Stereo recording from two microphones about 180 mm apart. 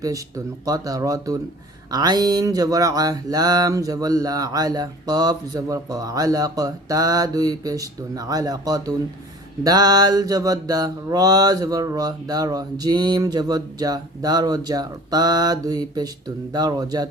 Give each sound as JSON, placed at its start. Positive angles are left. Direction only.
{"t": 0.0, "sound": "mantra", "side_deg": -20}